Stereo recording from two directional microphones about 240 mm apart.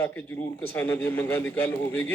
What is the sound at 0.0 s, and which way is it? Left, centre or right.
A man's voice, centre.